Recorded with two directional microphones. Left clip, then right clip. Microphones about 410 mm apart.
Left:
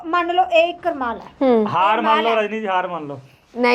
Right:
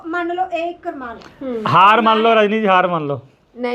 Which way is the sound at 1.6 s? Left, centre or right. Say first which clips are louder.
Right 6 dB; right.